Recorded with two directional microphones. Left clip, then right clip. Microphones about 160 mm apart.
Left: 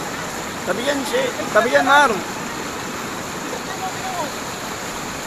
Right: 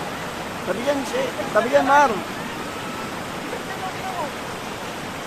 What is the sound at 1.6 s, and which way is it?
Speech, 5° left (ahead or behind).